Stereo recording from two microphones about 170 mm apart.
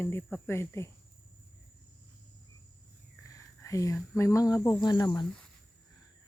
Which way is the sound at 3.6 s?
20° left (ahead or behind).